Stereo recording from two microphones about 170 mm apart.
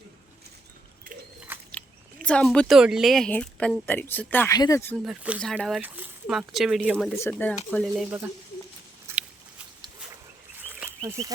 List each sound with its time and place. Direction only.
1.5 s a sound: 10° right (ahead or behind)
2.2 s a woman's voice: 5° left (ahead or behind)
5.0 s speech: 5° right (ahead or behind)
5.4 s speech: 5° left (ahead or behind)
7.2 s a woman's voice: 10° left (ahead or behind)
10.8 s a sound: 15° right (ahead or behind)